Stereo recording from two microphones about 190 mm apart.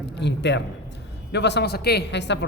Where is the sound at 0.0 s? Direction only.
65° left (ahead or behind).